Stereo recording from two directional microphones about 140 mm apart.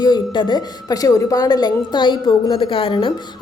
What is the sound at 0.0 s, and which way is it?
A woman's voice, 30° left (ahead or behind).